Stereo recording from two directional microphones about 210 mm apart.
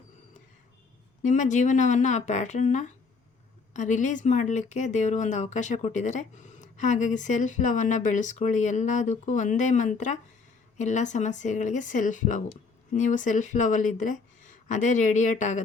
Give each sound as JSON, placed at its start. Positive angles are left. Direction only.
{"t": 1.2, "sound": "speech", "side_deg": 35}